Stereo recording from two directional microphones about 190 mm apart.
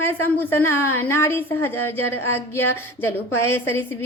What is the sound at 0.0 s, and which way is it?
A woman's voice, 10° left (ahead or behind).